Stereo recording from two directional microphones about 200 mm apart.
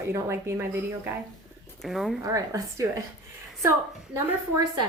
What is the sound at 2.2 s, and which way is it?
Speech, 15° right (ahead or behind).